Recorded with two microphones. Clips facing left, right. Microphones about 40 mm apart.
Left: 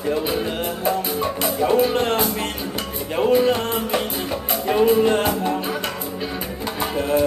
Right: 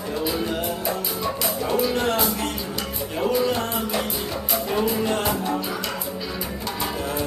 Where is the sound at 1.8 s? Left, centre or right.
Left.